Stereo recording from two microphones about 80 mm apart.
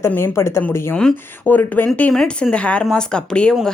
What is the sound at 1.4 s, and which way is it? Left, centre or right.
Speech, left.